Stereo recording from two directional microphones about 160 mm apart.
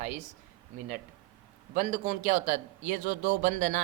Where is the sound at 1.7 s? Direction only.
50° right (ahead or behind).